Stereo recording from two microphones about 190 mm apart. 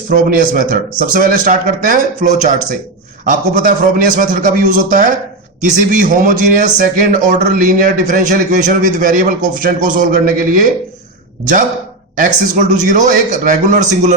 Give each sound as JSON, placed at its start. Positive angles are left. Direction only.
{"t": 0.1, "sound": "a man's voice", "side_deg": -50}
{"t": 12.1, "sound": "a man's voice", "side_deg": -40}